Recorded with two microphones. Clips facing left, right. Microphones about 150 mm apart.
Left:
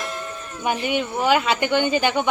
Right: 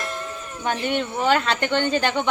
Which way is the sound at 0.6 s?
10° left (ahead or behind).